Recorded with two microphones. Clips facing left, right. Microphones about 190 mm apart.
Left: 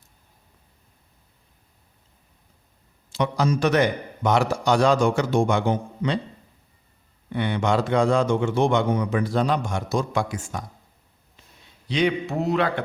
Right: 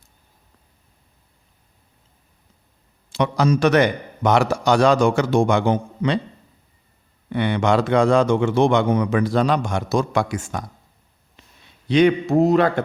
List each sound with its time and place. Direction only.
3.1 s a man's voice: 80° right
7.3 s a man's voice: 80° right
11.9 s a man's voice: 55° right (ahead or behind)